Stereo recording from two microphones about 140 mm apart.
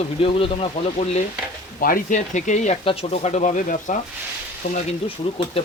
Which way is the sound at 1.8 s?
75° left (ahead or behind).